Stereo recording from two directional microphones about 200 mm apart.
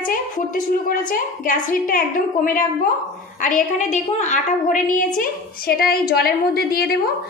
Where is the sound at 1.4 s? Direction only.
40° left (ahead or behind).